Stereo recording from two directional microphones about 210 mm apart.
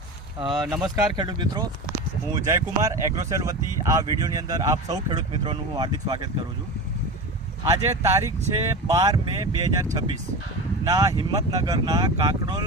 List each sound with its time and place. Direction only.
0.3 s speech: 20° right (ahead or behind)
7.6 s speech: 15° right (ahead or behind)